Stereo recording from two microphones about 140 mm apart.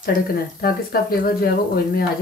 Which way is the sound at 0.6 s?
90° left.